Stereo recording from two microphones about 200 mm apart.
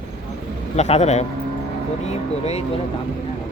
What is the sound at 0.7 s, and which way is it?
Speech, 35° left (ahead or behind).